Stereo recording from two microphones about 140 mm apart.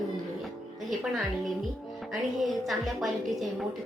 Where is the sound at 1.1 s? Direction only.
Centre (ahead or behind).